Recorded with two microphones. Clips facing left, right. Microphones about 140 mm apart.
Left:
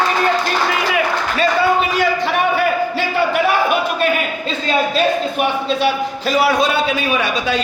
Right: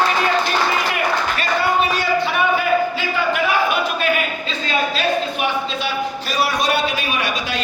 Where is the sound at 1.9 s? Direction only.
80° left.